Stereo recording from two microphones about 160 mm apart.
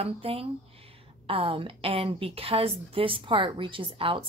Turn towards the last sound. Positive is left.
turn(degrees=-35)  # may be behind; listen again after turning